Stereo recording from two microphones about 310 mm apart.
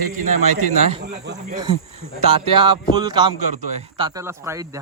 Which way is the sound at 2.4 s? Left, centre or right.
Centre.